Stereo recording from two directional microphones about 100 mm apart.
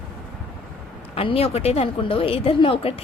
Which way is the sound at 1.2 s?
70° left (ahead or behind).